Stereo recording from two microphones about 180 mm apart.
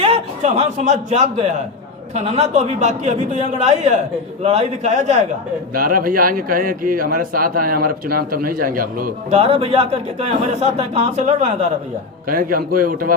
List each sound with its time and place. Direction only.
0.0 s a man's voice: 35° right (ahead or behind)
5.7 s a man's voice: 50° right (ahead or behind)
9.3 s speech: 35° right (ahead or behind)
12.3 s a man's voice: 50° right (ahead or behind)